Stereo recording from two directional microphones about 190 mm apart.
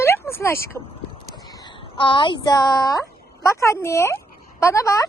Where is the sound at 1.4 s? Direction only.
20° left (ahead or behind).